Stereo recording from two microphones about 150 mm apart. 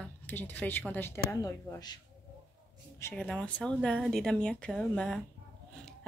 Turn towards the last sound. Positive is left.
turn(degrees=5)  # may be behind; listen again after turning